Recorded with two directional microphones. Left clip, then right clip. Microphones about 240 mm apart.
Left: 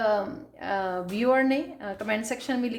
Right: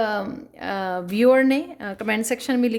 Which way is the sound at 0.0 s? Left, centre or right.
Right.